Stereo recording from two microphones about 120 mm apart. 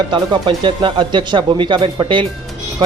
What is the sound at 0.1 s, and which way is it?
Speech, 45° right (ahead or behind).